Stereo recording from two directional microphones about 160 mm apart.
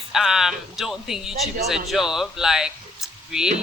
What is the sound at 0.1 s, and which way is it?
A woman's voice, centre (ahead or behind).